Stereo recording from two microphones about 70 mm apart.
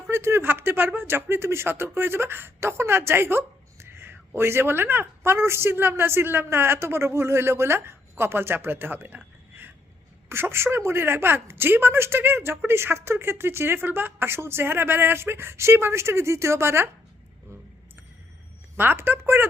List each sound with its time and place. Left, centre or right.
0.1 s a woman's voice: right
18.8 s a woman's voice: right